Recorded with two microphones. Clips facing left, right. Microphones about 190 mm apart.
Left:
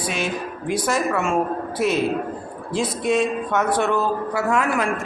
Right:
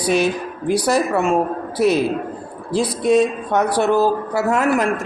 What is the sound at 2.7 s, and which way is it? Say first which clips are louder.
Speech: right 5 dB; 35° right (ahead or behind).